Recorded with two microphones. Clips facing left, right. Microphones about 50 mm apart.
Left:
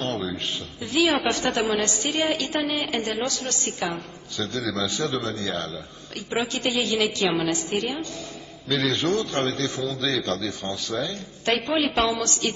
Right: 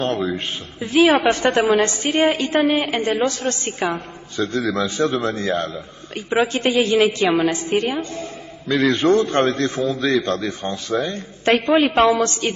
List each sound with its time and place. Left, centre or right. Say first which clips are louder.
0.0 s a woman's voice: right 6 dB; right